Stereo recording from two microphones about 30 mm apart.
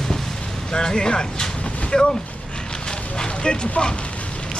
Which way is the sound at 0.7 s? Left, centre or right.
Left.